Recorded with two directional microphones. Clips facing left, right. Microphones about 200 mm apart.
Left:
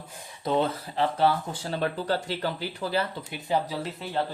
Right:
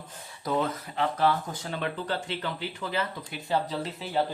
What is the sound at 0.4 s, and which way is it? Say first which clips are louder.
Speech: left 3 dB; 30° left (ahead or behind).